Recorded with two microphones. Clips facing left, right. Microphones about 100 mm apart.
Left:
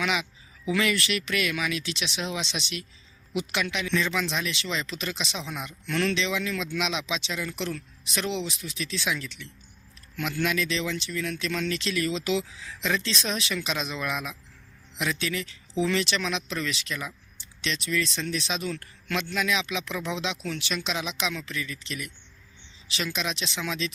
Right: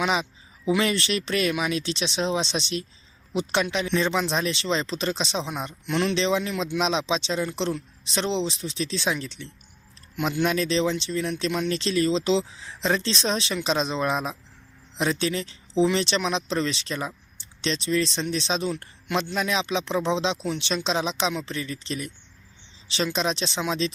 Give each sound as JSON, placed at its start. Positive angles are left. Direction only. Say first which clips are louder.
{"t": 0.0, "sound": "a sound", "louder": "right 4 dB", "side_deg": -35}
{"t": 0.8, "sound": "speech", "louder": "left 2 dB", "side_deg": -30}
{"t": 5.8, "sound": "speech", "louder": "right 2 dB", "side_deg": -20}
{"t": 6.1, "sound": "speech", "louder": "right 5 dB", "side_deg": -35}